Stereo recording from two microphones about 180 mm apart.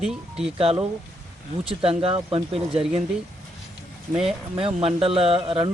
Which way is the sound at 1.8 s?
30° right (ahead or behind).